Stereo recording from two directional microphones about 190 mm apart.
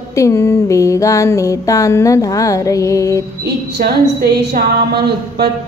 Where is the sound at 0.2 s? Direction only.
15° left (ahead or behind).